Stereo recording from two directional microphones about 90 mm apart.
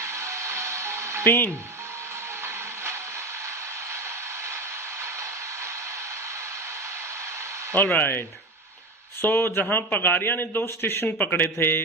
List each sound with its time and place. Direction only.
0.0 s music: 30° right (ahead or behind)
1.2 s speech: 25° left (ahead or behind)
7.8 s a man's voice: 20° left (ahead or behind)
9.2 s a man's voice: 25° left (ahead or behind)